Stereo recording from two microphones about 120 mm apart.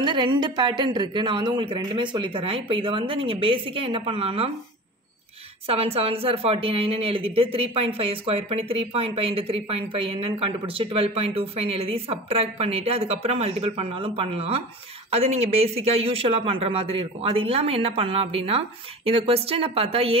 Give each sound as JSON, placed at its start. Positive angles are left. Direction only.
{"t": 0.0, "sound": "speech", "side_deg": -40}
{"t": 5.7, "sound": "speech", "side_deg": -55}